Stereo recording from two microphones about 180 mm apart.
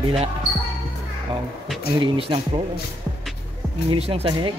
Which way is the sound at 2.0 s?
30° right (ahead or behind).